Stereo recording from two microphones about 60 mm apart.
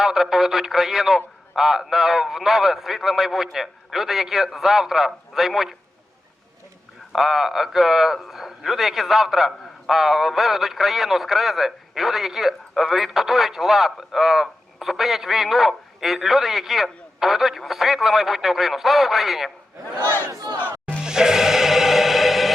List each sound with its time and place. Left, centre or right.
0.0 s a man's voice: centre
7.1 s a man's voice: centre
20.0 s battle cry: left
21.0 s music: centre